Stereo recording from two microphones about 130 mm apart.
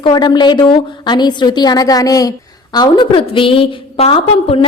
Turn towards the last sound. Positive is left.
turn(degrees=45)  # may be behind; listen again after turning